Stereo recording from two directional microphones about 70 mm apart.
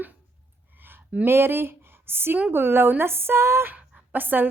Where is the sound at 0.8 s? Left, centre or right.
Right.